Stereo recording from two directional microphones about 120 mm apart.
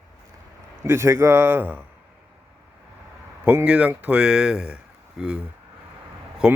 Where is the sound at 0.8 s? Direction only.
25° right (ahead or behind).